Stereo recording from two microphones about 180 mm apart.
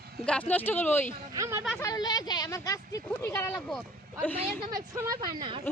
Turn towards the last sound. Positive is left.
turn(degrees=-30)  # may be behind; listen again after turning